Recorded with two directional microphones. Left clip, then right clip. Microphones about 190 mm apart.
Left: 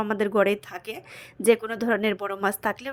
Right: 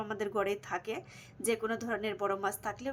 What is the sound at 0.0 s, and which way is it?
A woman's voice, 35° left (ahead or behind).